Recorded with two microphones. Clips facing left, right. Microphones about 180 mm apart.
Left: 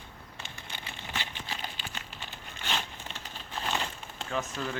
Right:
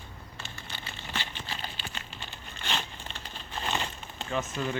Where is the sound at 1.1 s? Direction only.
10° left (ahead or behind).